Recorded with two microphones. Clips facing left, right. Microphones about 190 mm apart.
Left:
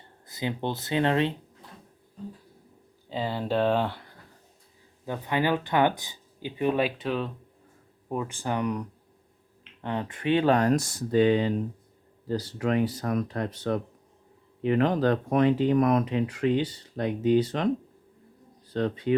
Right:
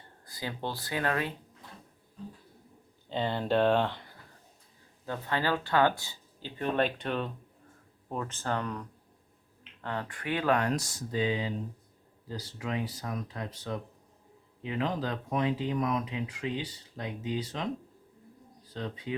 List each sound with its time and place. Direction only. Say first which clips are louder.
0.3 s speech: left 6 dB; 20° left (ahead or behind)
3.1 s speech: left 1 dB; 5° left (ahead or behind); by 10.7 s 30° left (ahead or behind)
10.7 s speech: left 8 dB; 55° left (ahead or behind)
18.7 s speech: left 10 dB; 65° left (ahead or behind)